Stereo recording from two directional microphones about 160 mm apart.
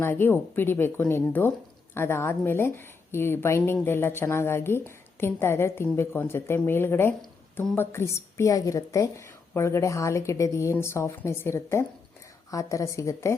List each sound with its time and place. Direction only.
0.0 s a woman's voice: 15° left (ahead or behind)